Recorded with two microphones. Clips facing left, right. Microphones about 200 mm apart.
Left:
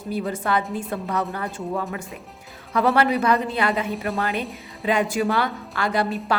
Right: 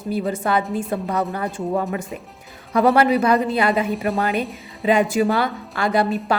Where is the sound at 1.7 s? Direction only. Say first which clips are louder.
Right 6 dB; 35° right (ahead or behind).